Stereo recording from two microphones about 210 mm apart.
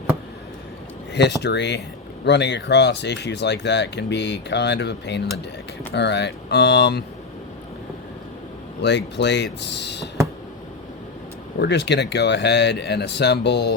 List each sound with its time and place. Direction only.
1.1 s speech: 55° left (ahead or behind)
8.8 s speech: 55° left (ahead or behind)
11.6 s speech: 55° left (ahead or behind)